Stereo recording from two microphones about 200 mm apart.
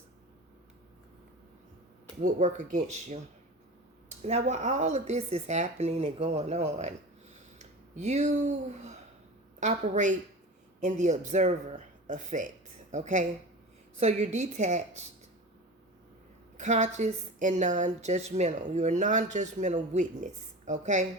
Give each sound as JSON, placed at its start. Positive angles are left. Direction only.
{"t": 2.2, "sound": "a woman's voice", "side_deg": -40}
{"t": 4.2, "sound": "a woman's voice", "side_deg": -35}
{"t": 16.6, "sound": "a woman's voice", "side_deg": -35}